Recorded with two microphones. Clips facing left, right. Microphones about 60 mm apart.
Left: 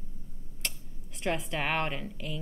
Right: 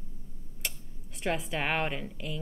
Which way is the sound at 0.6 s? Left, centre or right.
Centre.